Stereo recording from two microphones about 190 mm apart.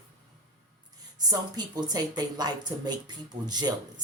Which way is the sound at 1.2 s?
20° right (ahead or behind).